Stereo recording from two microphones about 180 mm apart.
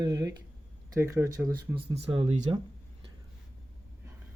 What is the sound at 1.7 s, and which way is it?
Speech, 30° right (ahead or behind).